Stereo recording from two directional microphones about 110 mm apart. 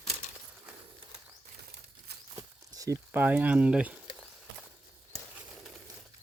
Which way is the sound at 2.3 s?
30° right (ahead or behind).